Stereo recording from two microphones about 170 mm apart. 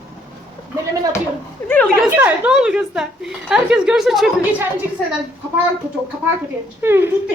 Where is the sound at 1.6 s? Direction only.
10° left (ahead or behind).